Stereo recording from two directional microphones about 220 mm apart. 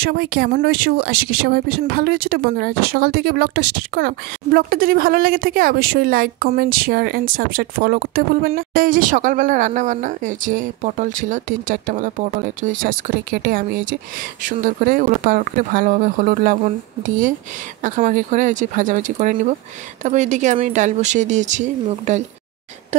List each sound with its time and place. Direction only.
0.0 s a woman's voice: 45° right (ahead or behind)
17.8 s a woman's voice: 35° right (ahead or behind)